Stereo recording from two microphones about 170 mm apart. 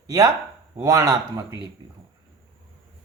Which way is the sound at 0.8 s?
20° right (ahead or behind).